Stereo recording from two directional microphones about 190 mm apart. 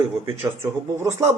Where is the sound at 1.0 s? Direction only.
15° right (ahead or behind).